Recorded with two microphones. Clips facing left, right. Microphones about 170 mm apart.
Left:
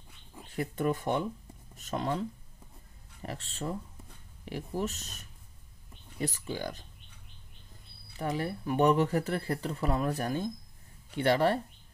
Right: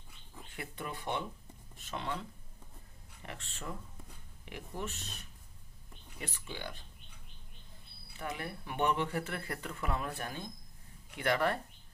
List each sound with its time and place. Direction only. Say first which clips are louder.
0.5 s speech: left 12 dB; 40° left (ahead or behind)
8.2 s speech: left 8 dB; 35° left (ahead or behind)